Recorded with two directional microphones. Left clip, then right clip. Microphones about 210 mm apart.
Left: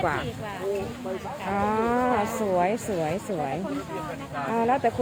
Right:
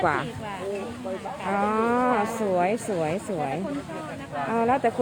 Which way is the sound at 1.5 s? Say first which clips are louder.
Right 1 dB; 10° right (ahead or behind).